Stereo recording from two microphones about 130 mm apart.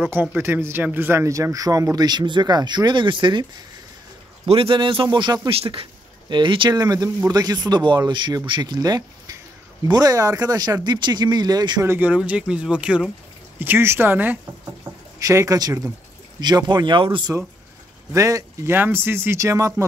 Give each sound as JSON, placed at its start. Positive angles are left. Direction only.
{"t": 0.0, "sound": "speech", "side_deg": -10}
{"t": 4.5, "sound": "speech", "side_deg": -45}
{"t": 5.5, "sound": "speech", "side_deg": -45}
{"t": 11.8, "sound": "speech", "side_deg": -15}
{"t": 15.1, "sound": "speech", "side_deg": -25}
{"t": 18.1, "sound": "speech", "side_deg": -25}